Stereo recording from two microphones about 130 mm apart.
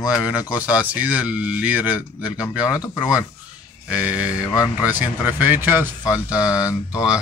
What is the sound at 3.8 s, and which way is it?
Speech, 10° right (ahead or behind).